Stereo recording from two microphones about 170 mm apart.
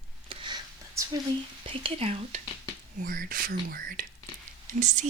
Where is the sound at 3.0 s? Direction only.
55° right (ahead or behind).